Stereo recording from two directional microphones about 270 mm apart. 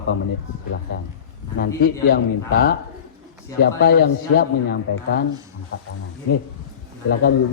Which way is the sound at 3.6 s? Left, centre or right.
Left.